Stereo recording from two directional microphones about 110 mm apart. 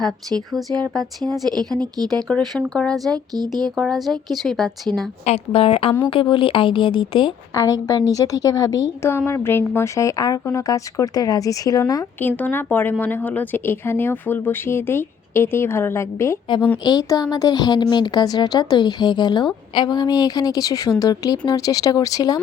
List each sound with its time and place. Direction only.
0.9 s speech: 5° left (ahead or behind)
1.5 s a woman's voice: 40° right (ahead or behind)
2.4 s speech: 5° left (ahead or behind)
3.1 s a woman's voice: 40° right (ahead or behind)
3.8 s speech: centre (ahead or behind)
5.2 s a woman's voice: 75° left (ahead or behind); by 7.3 s 50° left (ahead or behind)
7.5 s a woman's voice: 30° left (ahead or behind)
12.4 s speech: 15° left (ahead or behind)
16.8 s a woman's voice: 35° left (ahead or behind)